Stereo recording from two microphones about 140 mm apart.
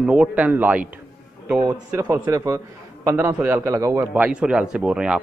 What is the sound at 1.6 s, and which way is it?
A man's voice, 25° right (ahead or behind).